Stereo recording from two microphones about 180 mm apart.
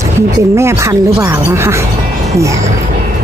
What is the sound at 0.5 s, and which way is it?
Speech, 15° right (ahead or behind).